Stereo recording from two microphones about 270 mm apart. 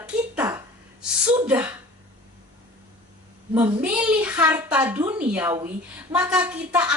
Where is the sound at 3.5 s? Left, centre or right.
Centre.